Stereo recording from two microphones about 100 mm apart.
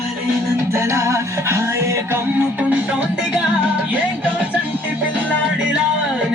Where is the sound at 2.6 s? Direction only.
15° right (ahead or behind).